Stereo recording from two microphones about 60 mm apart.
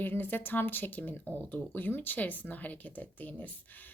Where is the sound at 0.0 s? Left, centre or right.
Left.